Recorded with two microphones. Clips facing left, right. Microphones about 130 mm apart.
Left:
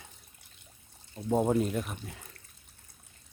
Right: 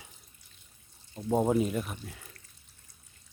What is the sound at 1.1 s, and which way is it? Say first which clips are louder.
Speech: even; centre (ahead or behind).